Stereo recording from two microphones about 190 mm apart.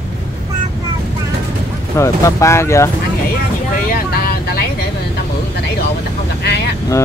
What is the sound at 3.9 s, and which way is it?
Vehicle, 50° left (ahead or behind).